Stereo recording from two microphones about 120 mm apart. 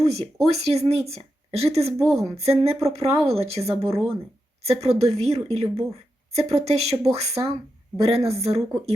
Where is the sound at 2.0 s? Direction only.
Centre (ahead or behind).